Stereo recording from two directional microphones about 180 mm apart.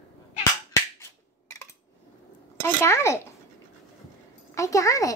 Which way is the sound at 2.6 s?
15° left (ahead or behind).